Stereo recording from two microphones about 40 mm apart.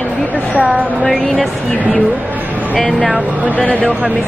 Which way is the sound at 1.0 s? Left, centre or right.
Centre.